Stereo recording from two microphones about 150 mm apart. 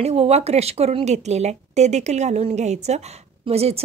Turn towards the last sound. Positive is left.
turn(degrees=-45)  # may be behind; listen again after turning